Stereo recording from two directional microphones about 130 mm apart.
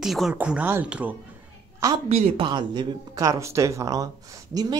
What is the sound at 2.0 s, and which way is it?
Speech, 50° right (ahead or behind).